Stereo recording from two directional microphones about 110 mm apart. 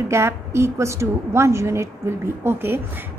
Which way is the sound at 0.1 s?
25° right (ahead or behind).